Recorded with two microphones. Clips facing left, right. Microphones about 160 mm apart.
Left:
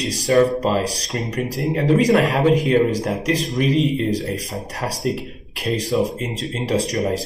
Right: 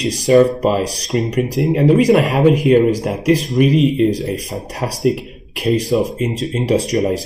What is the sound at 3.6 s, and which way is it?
Speech, 10° right (ahead or behind).